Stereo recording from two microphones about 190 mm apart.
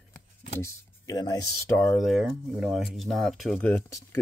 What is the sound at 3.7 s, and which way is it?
Speech, 10° left (ahead or behind).